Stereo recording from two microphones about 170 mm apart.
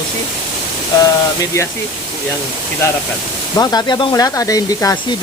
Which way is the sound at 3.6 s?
25° left (ahead or behind).